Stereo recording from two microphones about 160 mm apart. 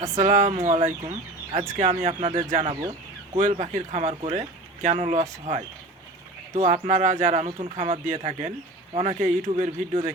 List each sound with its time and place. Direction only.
0.0 s speech: 50° right (ahead or behind)
2.0 s speech: 40° right (ahead or behind)
7.4 s speech: 35° right (ahead or behind)
8.0 s speech: 50° right (ahead or behind)